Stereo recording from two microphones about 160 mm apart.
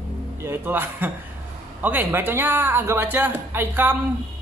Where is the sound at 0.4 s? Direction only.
15° right (ahead or behind).